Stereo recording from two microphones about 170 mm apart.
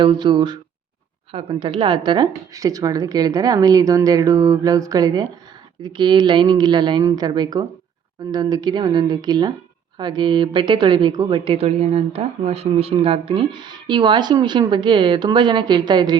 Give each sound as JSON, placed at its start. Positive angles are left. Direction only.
{"t": 0.0, "sound": "speech", "side_deg": -25}